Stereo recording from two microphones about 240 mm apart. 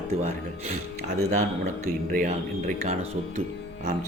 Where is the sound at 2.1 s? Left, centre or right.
Right.